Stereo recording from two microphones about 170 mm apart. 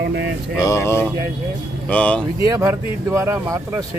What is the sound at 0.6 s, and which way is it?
Speech, 15° left (ahead or behind).